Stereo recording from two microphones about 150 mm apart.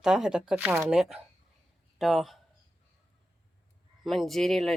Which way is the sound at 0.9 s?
5° right (ahead or behind).